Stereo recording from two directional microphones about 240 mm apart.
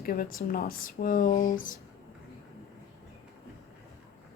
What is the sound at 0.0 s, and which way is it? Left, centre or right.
Speech, left.